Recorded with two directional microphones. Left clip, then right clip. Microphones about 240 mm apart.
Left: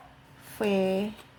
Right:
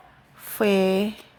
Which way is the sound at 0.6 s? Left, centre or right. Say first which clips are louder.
Right 6 dB; right.